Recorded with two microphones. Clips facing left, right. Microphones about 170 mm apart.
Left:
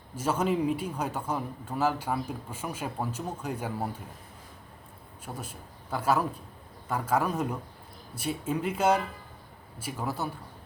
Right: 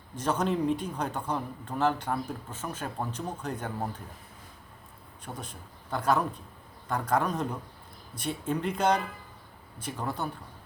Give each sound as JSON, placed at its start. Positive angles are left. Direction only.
{"t": 0.2, "sound": "a man's voice", "side_deg": 5}
{"t": 5.2, "sound": "a man's voice", "side_deg": 5}